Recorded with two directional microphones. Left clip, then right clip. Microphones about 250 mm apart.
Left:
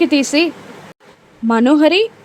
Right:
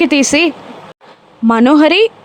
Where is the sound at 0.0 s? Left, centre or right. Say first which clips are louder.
Right 3 dB; centre.